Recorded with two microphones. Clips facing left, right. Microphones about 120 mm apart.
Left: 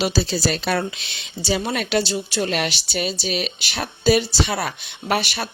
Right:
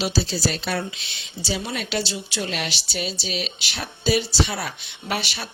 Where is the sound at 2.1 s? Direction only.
45° left (ahead or behind).